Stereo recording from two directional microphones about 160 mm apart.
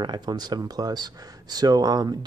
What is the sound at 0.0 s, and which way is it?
Speech, 25° right (ahead or behind).